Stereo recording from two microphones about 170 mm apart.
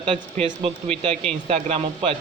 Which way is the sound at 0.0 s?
30° right (ahead or behind).